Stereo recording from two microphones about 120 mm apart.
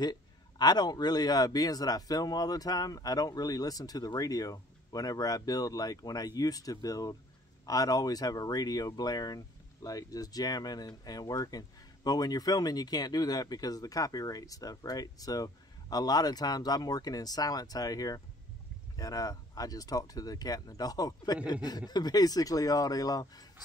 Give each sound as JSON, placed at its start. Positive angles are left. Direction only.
{"t": 0.0, "sound": "speech", "side_deg": 35}